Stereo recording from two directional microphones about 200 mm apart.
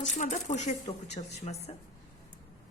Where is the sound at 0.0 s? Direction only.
40° left (ahead or behind).